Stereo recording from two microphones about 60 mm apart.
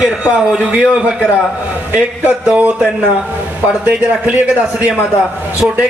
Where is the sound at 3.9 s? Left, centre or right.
Right.